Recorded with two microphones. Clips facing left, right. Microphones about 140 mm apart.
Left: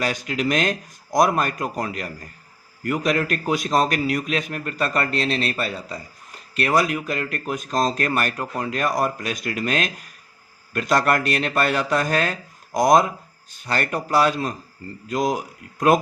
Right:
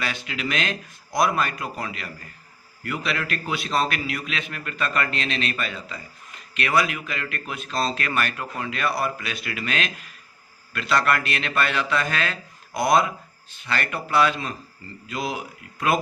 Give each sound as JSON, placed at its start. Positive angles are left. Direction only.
{"t": 0.0, "sound": "a man's voice", "side_deg": 40}